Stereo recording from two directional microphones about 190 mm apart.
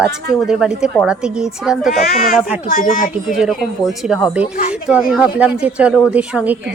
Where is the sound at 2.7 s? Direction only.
45° left (ahead or behind).